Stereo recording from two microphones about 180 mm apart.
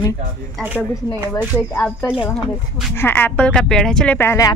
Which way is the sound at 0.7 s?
10° right (ahead or behind).